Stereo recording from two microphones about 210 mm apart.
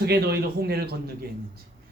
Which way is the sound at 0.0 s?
50° right (ahead or behind).